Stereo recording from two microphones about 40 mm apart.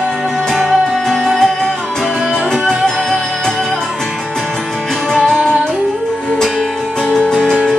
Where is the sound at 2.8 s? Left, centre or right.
Centre.